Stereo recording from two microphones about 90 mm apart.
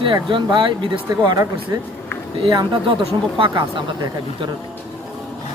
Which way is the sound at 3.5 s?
55° right (ahead or behind).